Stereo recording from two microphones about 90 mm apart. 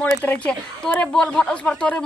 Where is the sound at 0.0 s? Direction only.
15° left (ahead or behind).